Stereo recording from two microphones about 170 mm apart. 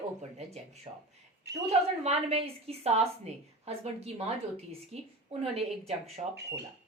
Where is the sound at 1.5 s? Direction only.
80° right.